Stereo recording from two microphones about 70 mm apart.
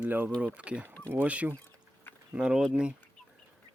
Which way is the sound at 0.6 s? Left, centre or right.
Centre.